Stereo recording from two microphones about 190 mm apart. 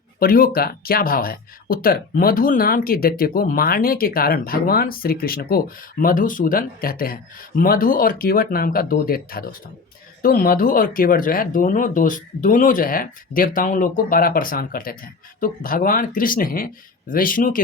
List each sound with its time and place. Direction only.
0.2 s speech: 50° left (ahead or behind)